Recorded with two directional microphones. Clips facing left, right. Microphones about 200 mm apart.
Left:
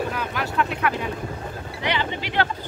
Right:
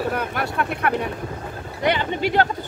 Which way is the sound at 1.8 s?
45° right (ahead or behind).